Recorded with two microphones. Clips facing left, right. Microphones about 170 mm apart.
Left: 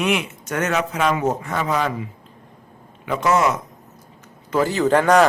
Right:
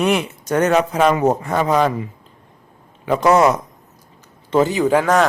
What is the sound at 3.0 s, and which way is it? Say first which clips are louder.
Speech: right 5 dB; 35° right (ahead or behind).